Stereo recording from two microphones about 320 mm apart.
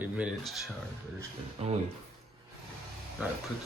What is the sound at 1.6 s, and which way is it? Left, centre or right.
Speech, centre.